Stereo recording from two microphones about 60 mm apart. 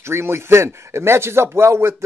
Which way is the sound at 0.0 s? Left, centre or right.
Right.